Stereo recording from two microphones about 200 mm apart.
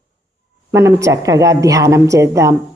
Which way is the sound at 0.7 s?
15° right (ahead or behind).